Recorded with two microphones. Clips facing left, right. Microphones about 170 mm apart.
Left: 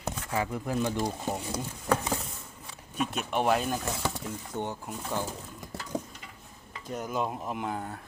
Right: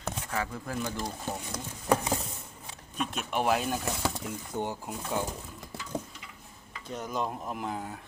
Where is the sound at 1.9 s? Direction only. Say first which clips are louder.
Right 1 dB; 15° right (ahead or behind).